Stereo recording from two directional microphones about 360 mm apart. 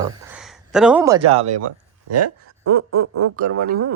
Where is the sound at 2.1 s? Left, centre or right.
Right.